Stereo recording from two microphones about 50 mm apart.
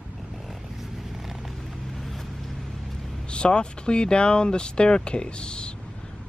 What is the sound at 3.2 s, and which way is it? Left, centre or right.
Speech, centre.